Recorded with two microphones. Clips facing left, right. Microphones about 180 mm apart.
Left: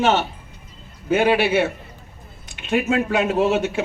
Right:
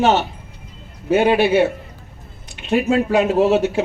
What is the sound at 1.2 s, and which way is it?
Speech, 35° right (ahead or behind).